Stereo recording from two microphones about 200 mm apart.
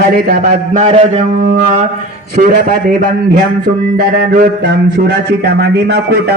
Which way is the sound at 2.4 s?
50° right (ahead or behind).